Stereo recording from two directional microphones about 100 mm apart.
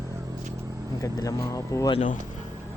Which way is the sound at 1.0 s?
35° left (ahead or behind).